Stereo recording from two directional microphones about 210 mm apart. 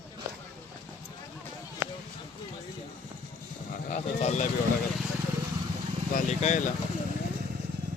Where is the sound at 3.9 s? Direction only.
30° left (ahead or behind).